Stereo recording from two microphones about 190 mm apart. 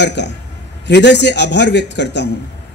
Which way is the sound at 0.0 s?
65° left (ahead or behind).